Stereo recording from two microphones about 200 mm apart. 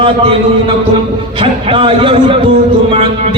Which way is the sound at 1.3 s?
25° right (ahead or behind).